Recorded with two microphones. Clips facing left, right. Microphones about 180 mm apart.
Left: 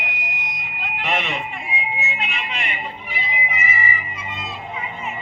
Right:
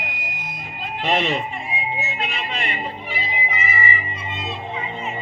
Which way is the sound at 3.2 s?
30° right (ahead or behind).